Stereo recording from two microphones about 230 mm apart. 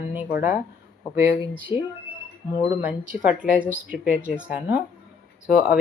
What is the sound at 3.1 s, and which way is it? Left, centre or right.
Speech, centre.